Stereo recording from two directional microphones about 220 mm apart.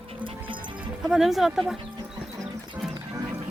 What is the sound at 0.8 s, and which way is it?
Speech, centre (ahead or behind).